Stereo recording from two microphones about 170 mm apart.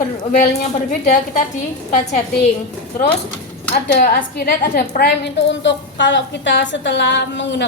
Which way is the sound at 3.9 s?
65° left (ahead or behind).